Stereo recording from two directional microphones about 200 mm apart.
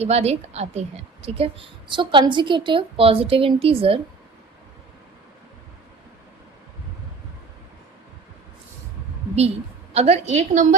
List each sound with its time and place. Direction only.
0.0 s a woman's voice: 30° right (ahead or behind)
9.9 s a woman's voice: 30° right (ahead or behind)